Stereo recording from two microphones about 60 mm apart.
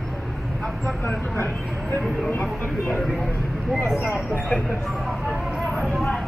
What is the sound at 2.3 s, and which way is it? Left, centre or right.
Speech, left.